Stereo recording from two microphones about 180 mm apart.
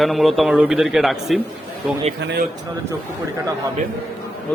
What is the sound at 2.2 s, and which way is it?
Speech, 75° right (ahead or behind).